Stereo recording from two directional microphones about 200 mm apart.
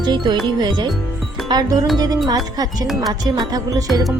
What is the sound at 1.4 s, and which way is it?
Music, 20° right (ahead or behind).